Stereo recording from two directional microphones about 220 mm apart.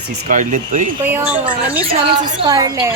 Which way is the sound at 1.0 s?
5° right (ahead or behind).